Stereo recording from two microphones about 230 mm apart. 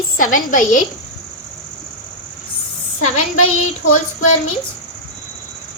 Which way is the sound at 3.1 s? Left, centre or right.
Left.